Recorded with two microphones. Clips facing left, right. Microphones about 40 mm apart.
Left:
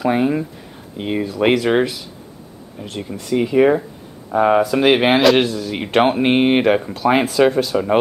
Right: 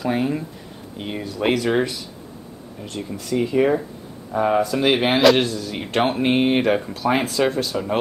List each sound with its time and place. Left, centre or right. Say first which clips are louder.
0.0 s speech: left 5 dB; left
2.8 s speech: left 2 dB; centre
3.3 s speech: left 4 dB; left
5.2 s speech: left 2 dB; centre; by 6.6 s left
6.6 s speech: left 4 dB; centre